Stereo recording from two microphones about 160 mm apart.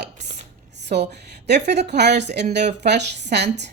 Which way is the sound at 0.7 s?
90° right.